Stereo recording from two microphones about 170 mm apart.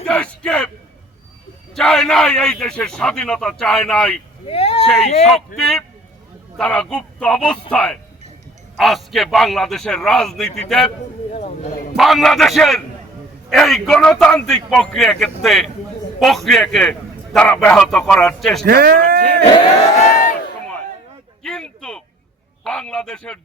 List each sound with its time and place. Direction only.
0.0 s a man's voice: 5° left (ahead or behind)
1.7 s a man's voice: 5° left (ahead or behind)
4.4 s speech: 35° left (ahead or behind)
5.5 s a man's voice: centre (ahead or behind)
11.3 s speech: 40° left (ahead or behind)
11.9 s a man's voice: centre (ahead or behind)
18.6 s speech: 65° right (ahead or behind)
20.1 s a sound: 50° left (ahead or behind)
21.4 s a sound: 5° left (ahead or behind)
22.6 s a man's voice: 5° left (ahead or behind)